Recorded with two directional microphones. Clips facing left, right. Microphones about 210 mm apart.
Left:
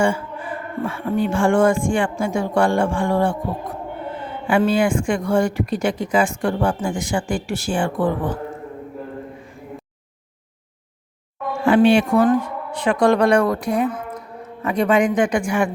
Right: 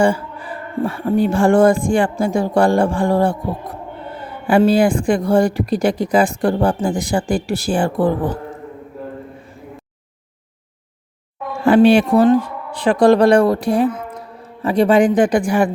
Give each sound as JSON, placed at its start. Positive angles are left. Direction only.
{"t": 0.0, "sound": "speech", "side_deg": -35}
{"t": 11.6, "sound": "speech", "side_deg": -35}